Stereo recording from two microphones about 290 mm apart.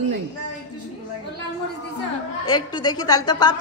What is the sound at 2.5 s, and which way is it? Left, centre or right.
Speech, centre.